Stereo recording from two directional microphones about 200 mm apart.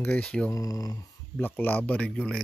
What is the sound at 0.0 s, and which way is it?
Speech, 5° left (ahead or behind).